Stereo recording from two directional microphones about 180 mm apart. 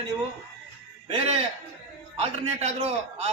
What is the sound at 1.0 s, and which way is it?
A man's voice, 35° right (ahead or behind).